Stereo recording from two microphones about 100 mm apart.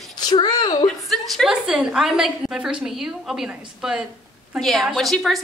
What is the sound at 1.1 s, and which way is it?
A woman's voice, centre (ahead or behind).